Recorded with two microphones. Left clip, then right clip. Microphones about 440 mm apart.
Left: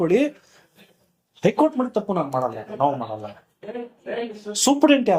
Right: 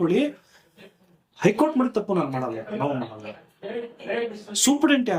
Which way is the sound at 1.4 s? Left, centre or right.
Left.